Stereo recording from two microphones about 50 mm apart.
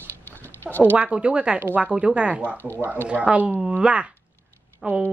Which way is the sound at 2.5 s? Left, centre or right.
Left.